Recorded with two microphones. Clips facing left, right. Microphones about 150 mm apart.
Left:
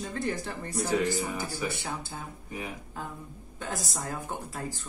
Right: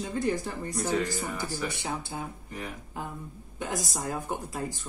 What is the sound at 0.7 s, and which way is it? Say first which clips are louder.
Speech: left 2 dB; 10° left (ahead or behind).